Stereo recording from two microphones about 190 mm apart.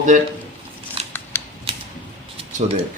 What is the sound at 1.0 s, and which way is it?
Scissors, 35° right (ahead or behind).